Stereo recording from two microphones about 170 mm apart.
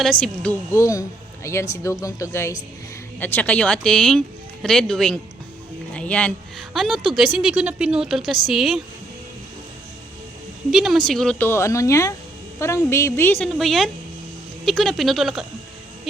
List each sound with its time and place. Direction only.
0.0 s a woman's voice: 5° left (ahead or behind)
5.9 s a sound: 5° left (ahead or behind)
6.7 s a woman's voice: centre (ahead or behind)
10.7 s speech: centre (ahead or behind)
13.5 s a woman's voice: centre (ahead or behind)